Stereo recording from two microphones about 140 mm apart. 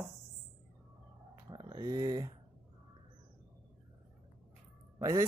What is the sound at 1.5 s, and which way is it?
Speech, 30° right (ahead or behind).